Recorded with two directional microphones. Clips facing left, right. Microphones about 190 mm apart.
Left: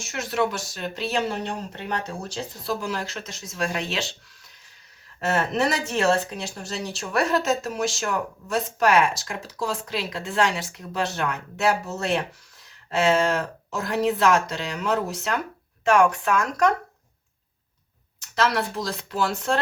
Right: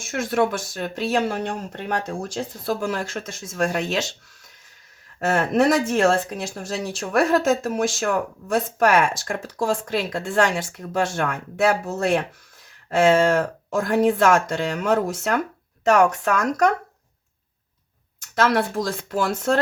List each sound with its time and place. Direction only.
0.0 s speech: 50° right (ahead or behind)
5.3 s speech: 50° right (ahead or behind)
18.3 s speech: 50° right (ahead or behind)